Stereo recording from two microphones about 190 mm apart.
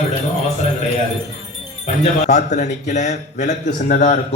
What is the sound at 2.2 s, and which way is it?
Speech, 40° left (ahead or behind).